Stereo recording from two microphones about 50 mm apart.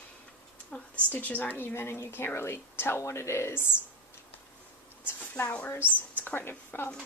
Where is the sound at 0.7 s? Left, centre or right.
Left.